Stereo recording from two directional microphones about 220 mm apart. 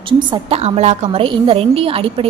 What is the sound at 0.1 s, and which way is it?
A woman's voice, 25° right (ahead or behind).